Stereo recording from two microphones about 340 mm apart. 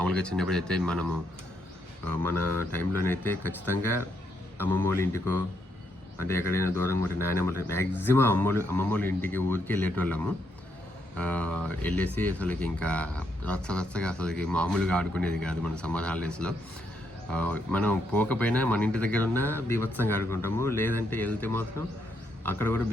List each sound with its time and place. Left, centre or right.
0.0 s speech: centre
2.7 s speech: centre
11.2 s speech: centre